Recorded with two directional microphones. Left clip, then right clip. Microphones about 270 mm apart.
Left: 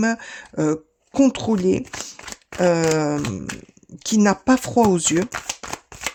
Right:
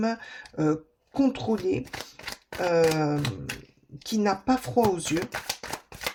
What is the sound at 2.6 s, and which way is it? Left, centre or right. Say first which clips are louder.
Speech: left 5 dB; left.